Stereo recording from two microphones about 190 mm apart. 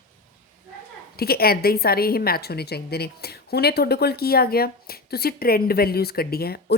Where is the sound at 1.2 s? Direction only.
55° left (ahead or behind).